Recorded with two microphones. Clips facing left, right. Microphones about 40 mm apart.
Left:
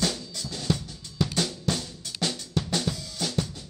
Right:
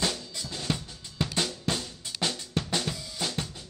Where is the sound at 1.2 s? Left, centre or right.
Right.